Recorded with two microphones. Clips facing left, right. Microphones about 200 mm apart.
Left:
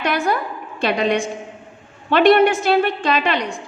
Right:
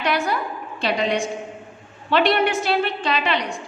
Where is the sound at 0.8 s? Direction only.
50° left (ahead or behind).